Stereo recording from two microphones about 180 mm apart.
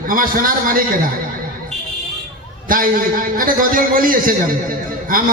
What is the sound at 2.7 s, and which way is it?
Music, 50° right (ahead or behind).